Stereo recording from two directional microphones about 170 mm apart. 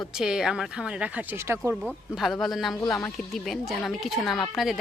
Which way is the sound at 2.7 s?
20° left (ahead or behind).